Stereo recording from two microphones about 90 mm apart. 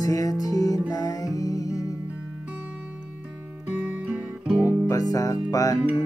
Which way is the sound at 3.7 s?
15° right (ahead or behind).